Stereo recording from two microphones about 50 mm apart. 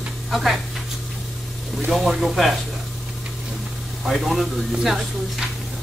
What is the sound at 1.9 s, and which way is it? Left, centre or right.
Speech, centre.